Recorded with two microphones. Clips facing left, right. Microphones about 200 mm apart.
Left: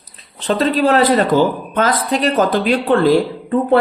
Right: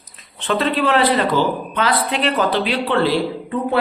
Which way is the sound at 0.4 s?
40° left (ahead or behind).